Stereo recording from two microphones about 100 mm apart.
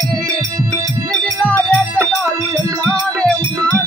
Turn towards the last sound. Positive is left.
turn(degrees=10)  # may be behind; listen again after turning